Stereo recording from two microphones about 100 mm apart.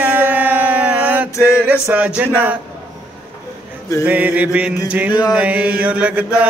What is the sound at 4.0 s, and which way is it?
Mantra, 15° right (ahead or behind).